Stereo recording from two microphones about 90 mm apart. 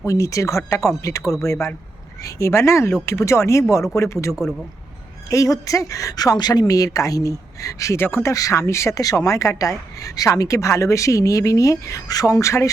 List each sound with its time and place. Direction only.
0.0 s speech: 35° left (ahead or behind)
8.0 s speech: 25° left (ahead or behind)
8.3 s speech: 40° left (ahead or behind)